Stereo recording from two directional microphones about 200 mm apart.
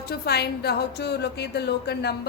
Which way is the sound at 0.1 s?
55° left (ahead or behind).